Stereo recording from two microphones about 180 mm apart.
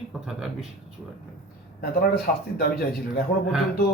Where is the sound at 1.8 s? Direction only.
55° left (ahead or behind).